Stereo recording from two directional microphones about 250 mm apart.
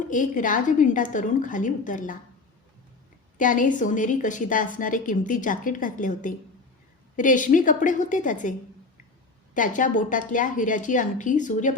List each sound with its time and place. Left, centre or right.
0.0 s a woman's voice: left
3.3 s a woman's voice: left
9.6 s a woman's voice: left